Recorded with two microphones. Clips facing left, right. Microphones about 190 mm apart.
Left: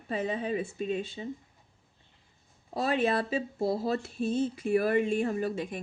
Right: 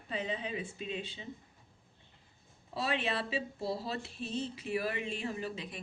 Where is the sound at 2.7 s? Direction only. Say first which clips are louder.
Left 7 dB; 45° left (ahead or behind).